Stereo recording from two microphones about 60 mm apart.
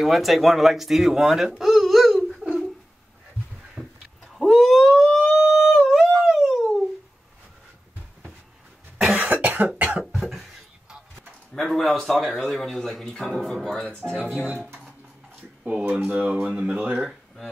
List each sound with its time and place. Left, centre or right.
0.0 s speech: centre
1.6 s a sound: centre
3.8 s a sound: centre
5.6 s dog: centre
8.9 s cough: centre
9.3 s cough: right
10.1 s beatboxing: centre
11.5 s a sound: centre
12.2 s speech: centre
14.3 s speech: right
15.9 s speech: right